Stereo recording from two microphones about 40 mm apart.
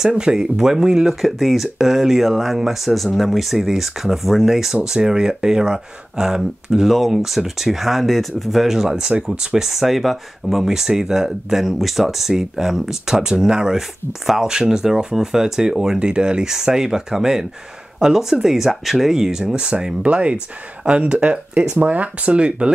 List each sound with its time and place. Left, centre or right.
0.0 s speech: centre
1.2 s speech: centre
4.8 s speech: centre
9.7 s speech: centre
14.5 s speech: centre
19.5 s speech: right
20.0 s speech: right